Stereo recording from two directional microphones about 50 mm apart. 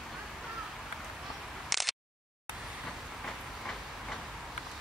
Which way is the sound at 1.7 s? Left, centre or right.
Centre.